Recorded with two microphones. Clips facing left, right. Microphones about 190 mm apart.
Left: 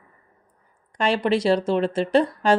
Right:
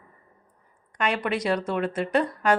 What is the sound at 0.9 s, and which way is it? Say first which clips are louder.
A woman's voice: left 5 dB; 30° left (ahead or behind).